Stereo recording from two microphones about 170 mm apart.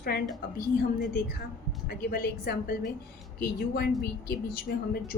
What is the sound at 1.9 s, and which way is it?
A woman's voice, 65° left (ahead or behind).